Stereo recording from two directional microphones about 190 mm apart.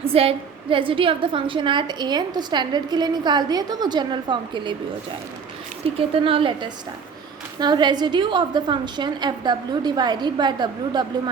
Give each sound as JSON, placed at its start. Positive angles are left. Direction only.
{"t": 0.0, "sound": "a woman's voice", "side_deg": -30}
{"t": 5.8, "sound": "a woman's voice", "side_deg": -30}